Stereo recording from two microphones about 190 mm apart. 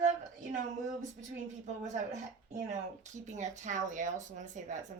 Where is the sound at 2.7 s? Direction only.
40° right (ahead or behind).